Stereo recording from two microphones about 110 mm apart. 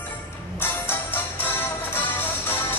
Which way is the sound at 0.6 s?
20° left (ahead or behind).